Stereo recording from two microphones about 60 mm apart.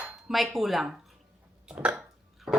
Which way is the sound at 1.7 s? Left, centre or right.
Right.